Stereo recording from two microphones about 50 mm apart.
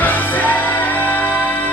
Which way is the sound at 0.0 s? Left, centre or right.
Left.